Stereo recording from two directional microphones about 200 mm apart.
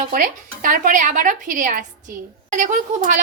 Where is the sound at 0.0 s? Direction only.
40° right (ahead or behind).